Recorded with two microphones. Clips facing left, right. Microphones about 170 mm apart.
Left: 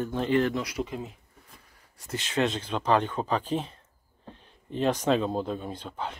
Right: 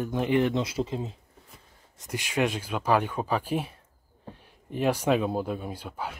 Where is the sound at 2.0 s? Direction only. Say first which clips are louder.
Even; 10° right (ahead or behind).